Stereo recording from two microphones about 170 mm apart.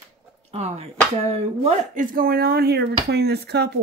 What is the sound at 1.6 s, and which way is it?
Speech, 50° right (ahead or behind).